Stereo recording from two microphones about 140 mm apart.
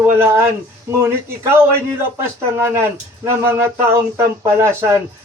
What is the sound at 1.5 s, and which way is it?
Speech, 20° right (ahead or behind).